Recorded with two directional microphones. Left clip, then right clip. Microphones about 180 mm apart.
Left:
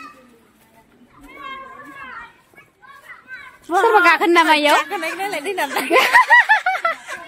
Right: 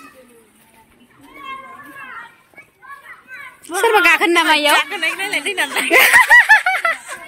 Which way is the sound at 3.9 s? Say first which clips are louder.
Right 2 dB; centre (ahead or behind).